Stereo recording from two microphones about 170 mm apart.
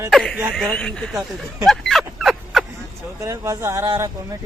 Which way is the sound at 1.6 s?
Centre (ahead or behind).